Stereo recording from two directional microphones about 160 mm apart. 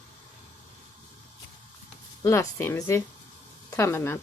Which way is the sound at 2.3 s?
15° left (ahead or behind).